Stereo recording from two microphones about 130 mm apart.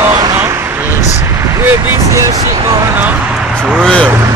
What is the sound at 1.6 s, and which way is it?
Speech, 20° right (ahead or behind).